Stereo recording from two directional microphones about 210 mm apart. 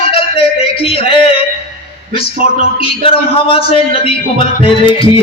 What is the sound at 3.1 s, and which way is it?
A man's voice, 25° left (ahead or behind).